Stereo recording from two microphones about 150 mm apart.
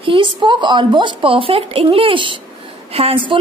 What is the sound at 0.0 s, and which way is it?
A woman's voice, 35° right (ahead or behind).